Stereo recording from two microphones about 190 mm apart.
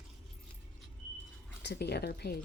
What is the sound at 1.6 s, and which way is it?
Speech, 60° left (ahead or behind).